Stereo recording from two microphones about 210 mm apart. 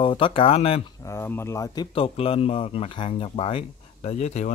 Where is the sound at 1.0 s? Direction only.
10° left (ahead or behind).